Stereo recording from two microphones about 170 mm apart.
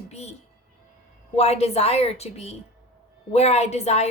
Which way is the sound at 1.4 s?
40° left (ahead or behind).